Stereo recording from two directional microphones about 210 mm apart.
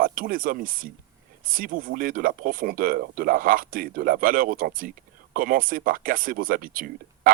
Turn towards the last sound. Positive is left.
turn(degrees=-40)  # may be behind; listen again after turning